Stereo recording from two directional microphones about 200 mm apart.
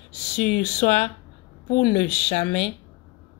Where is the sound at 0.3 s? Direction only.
30° left (ahead or behind).